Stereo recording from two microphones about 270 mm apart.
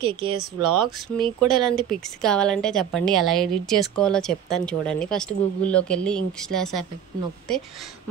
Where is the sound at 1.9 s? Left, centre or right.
Centre.